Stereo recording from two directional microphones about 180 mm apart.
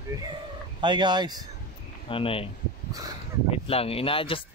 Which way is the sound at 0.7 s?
25° right (ahead or behind).